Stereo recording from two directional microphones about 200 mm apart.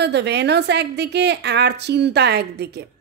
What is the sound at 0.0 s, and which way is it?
A woman's voice, 60° right (ahead or behind).